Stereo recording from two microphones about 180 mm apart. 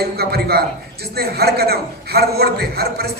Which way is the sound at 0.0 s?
60° right (ahead or behind).